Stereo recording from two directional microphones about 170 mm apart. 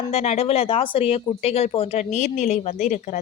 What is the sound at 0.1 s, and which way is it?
Speech, 35° left (ahead or behind).